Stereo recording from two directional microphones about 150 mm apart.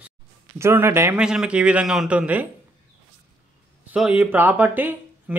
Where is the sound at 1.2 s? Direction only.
5° right (ahead or behind).